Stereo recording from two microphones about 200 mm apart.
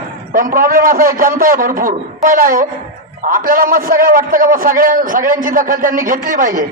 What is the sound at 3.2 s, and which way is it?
A man's voice, 45° right (ahead or behind).